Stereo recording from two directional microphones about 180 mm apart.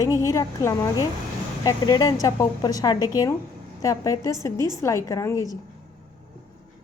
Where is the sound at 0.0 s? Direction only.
20° left (ahead or behind).